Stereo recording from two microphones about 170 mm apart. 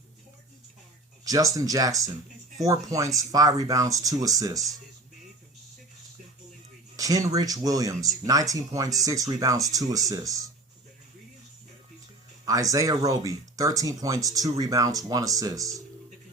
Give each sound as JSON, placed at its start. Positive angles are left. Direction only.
{"t": 1.2, "sound": "a sound", "side_deg": -20}
{"t": 1.5, "sound": "speech", "side_deg": -20}
{"t": 6.9, "sound": "speech", "side_deg": -20}
{"t": 12.5, "sound": "speech", "side_deg": -20}